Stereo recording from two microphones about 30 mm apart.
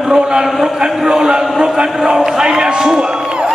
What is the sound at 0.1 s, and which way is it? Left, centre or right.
Speech, right.